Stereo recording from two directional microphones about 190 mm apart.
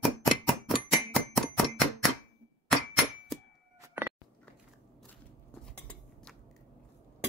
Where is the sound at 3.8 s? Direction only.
15° right (ahead or behind).